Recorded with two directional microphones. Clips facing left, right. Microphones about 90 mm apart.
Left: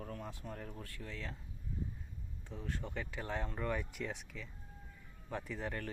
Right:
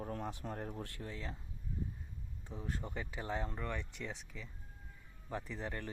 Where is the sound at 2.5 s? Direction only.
5° right (ahead or behind).